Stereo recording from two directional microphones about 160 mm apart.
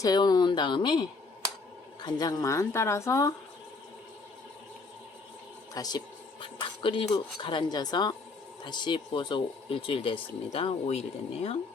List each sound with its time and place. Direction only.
0.0 s speech: 25° left (ahead or behind)
2.0 s speech: 25° left (ahead or behind)
5.7 s speech: 25° left (ahead or behind)